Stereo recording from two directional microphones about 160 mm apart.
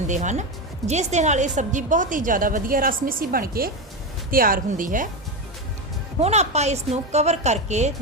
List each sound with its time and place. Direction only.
0.1 s a woman's voice: 50° right (ahead or behind)
6.1 s a woman's voice: 40° right (ahead or behind)